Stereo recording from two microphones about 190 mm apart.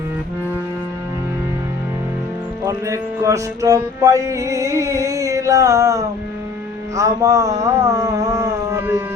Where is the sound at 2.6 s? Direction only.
15° right (ahead or behind).